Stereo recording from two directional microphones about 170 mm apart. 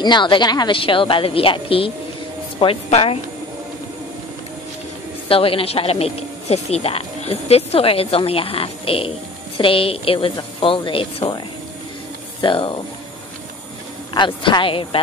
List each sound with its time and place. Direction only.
0.0 s speech: 25° left (ahead or behind)
5.3 s speech: 35° left (ahead or behind)
14.1 s speech: 25° left (ahead or behind)